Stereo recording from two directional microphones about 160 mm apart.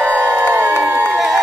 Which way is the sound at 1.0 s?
Centre (ahead or behind).